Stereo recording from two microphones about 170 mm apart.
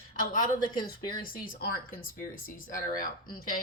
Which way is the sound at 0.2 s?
50° left (ahead or behind).